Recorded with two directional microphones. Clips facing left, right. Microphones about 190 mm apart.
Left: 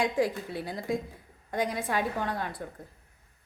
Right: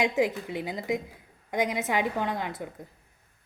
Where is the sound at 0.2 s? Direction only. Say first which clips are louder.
Right 2 dB; 20° right (ahead or behind).